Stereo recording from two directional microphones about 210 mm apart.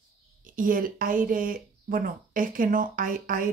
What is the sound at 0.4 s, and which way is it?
Speech, 40° right (ahead or behind).